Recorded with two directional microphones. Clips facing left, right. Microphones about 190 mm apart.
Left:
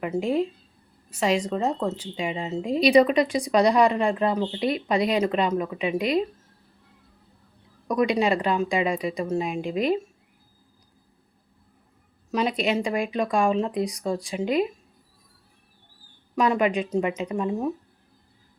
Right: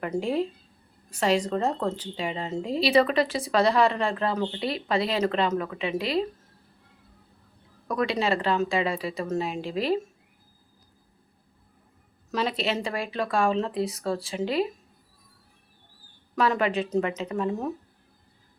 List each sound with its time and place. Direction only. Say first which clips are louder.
0.0 s speech: left 2 dB; 5° left (ahead or behind)
7.9 s speech: left 4 dB; 15° left (ahead or behind)
9.6 s a woman's voice: left 3 dB; 30° right (ahead or behind)
12.3 s speech: left 3 dB; 10° left (ahead or behind)
14.4 s a woman's voice: left 3 dB; 30° right (ahead or behind)
16.3 s speech: left 2 dB; 10° left (ahead or behind)